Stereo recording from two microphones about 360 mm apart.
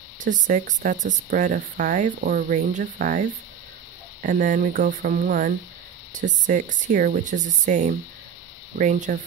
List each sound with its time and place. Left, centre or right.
0.2 s speech: right